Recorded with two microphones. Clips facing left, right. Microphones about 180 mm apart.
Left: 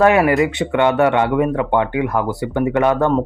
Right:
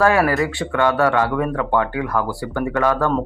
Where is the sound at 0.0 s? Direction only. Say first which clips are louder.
Left 3 dB; 20° left (ahead or behind).